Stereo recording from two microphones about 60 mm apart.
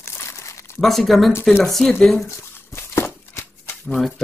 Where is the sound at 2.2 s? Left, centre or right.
Left.